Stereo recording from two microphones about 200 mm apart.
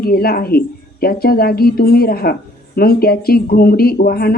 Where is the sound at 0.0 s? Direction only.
50° left (ahead or behind).